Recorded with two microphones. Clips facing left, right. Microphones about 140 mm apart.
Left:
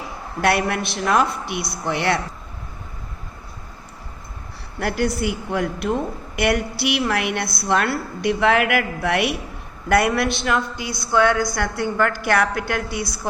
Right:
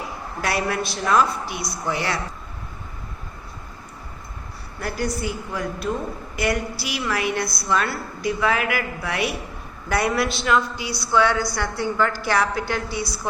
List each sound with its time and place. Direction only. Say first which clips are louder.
0.4 s a woman's voice: left 4 dB; 60° left (ahead or behind)
4.8 s a woman's voice: left 4 dB; 70° left (ahead or behind); by 13.1 s 55° left (ahead or behind)